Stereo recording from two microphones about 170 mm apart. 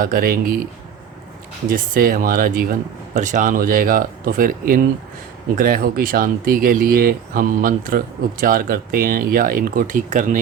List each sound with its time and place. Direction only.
0.0 s speech: 55° right (ahead or behind)
1.7 s speech: 55° right (ahead or behind)